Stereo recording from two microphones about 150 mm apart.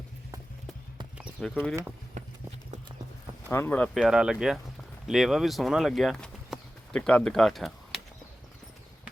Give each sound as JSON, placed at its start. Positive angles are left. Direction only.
{"t": 1.4, "sound": "speech", "side_deg": 5}
{"t": 2.2, "sound": "clip-clop", "side_deg": -50}
{"t": 3.5, "sound": "speech", "side_deg": 15}
{"t": 3.9, "sound": "speech", "side_deg": -5}